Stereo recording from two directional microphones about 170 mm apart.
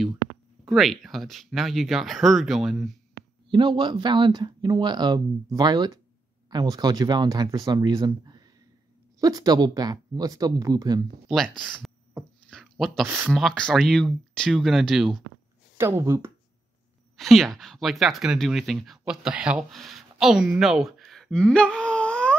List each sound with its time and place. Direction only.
0.7 s speech: centre (ahead or behind)
3.4 s speech: 30° right (ahead or behind)
11.2 s speech: centre (ahead or behind)
12.4 s a sound: 5° left (ahead or behind)
13.0 s speech: 10° right (ahead or behind)
13.3 s speech: 5° left (ahead or behind)
15.8 s speech: 15° right (ahead or behind)
17.2 s speech: centre (ahead or behind)